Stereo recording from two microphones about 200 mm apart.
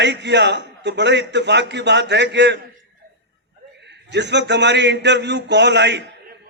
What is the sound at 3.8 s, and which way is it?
A man's voice, 60° right (ahead or behind).